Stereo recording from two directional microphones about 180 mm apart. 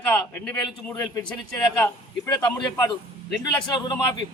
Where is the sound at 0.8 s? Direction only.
15° left (ahead or behind).